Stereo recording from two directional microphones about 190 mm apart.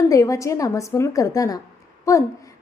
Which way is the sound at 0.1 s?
15° left (ahead or behind).